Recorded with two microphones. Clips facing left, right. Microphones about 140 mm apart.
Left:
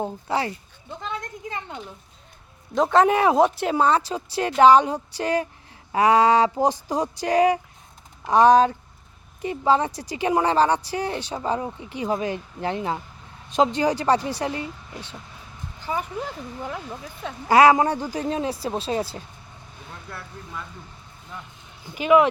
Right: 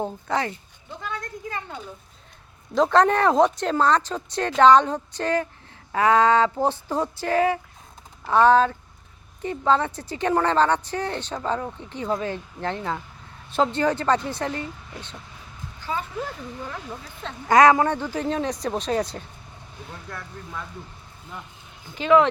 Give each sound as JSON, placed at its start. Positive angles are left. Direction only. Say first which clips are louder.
{"t": 1.0, "sound": "a sound", "louder": "even", "side_deg": 20}
{"t": 2.7, "sound": "a woman's voice", "louder": "even", "side_deg": 0}
{"t": 17.5, "sound": "speech", "louder": "even", "side_deg": 30}
{"t": 18.1, "sound": "a woman's voice", "louder": "even", "side_deg": 15}
{"t": 21.9, "sound": "a woman's voice", "louder": "left 1 dB", "side_deg": 10}